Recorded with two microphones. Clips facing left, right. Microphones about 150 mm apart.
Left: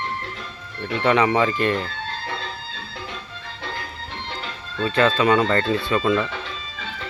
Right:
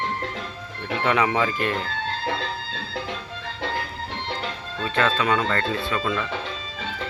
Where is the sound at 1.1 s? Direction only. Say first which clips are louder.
Left 4 dB; 5° right (ahead or behind).